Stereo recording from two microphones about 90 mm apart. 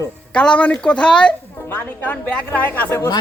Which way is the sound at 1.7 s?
20° left (ahead or behind).